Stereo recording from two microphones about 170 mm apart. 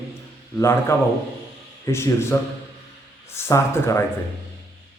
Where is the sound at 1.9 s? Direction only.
15° left (ahead or behind).